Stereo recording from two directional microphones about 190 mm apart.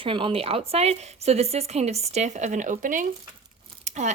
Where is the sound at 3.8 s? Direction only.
40° right (ahead or behind).